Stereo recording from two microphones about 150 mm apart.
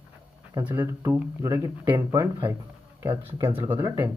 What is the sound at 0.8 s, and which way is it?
Speech, 20° right (ahead or behind).